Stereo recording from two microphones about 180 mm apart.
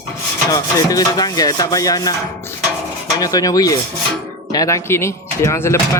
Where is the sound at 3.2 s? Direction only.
20° left (ahead or behind).